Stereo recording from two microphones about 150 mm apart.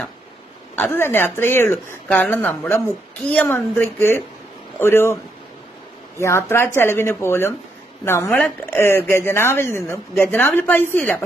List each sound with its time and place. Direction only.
0.7 s a woman's voice: 15° left (ahead or behind)